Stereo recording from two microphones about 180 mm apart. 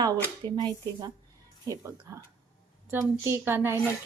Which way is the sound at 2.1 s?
20° right (ahead or behind).